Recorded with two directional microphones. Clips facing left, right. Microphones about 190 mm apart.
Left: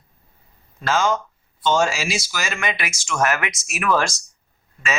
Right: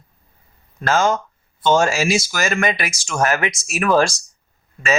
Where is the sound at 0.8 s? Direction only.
45° right (ahead or behind).